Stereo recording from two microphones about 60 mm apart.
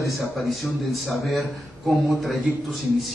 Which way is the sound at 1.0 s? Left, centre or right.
Centre.